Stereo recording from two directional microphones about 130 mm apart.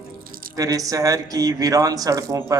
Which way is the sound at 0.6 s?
25° right (ahead or behind).